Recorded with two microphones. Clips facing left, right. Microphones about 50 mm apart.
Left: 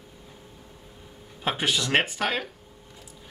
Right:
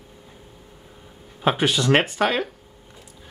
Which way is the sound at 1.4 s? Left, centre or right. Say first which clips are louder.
Right 6 dB; right.